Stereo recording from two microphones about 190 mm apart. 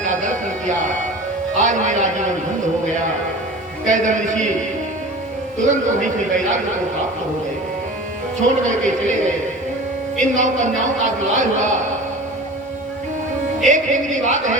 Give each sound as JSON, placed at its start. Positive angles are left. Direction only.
{"t": 0.0, "sound": "music", "side_deg": -40}
{"t": 1.5, "sound": "a man's voice", "side_deg": -40}
{"t": 3.8, "sound": "a man's voice", "side_deg": -40}
{"t": 5.5, "sound": "a man's voice", "side_deg": -40}
{"t": 8.4, "sound": "a man's voice", "side_deg": -40}
{"t": 13.7, "sound": "a man's voice", "side_deg": -40}